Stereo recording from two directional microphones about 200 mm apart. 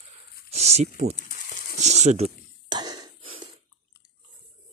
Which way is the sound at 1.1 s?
40° left (ahead or behind).